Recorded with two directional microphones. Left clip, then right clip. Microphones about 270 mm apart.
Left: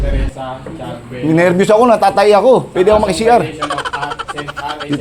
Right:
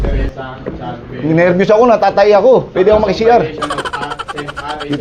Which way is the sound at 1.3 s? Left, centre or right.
Left.